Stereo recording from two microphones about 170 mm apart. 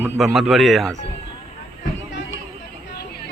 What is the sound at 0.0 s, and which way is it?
Speech, centre (ahead or behind).